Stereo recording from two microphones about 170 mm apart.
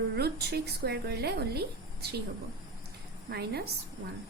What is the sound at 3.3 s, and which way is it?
Speech, 70° right (ahead or behind).